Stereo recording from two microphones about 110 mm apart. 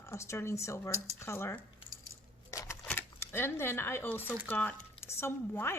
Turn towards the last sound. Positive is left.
turn(degrees=20)  # may be behind; listen again after turning